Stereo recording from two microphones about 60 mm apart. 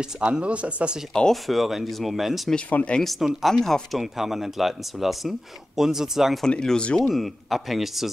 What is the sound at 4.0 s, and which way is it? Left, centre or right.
Speech, centre.